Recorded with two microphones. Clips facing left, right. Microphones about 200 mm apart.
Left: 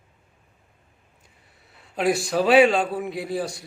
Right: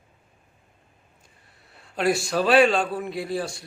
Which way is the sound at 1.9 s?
Centre (ahead or behind).